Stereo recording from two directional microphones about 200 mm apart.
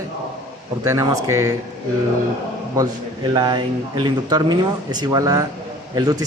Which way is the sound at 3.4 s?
20° right (ahead or behind).